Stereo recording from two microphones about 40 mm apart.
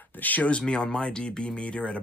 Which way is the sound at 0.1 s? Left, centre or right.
Left.